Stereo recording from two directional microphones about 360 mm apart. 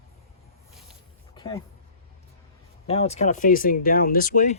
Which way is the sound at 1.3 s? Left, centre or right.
Centre.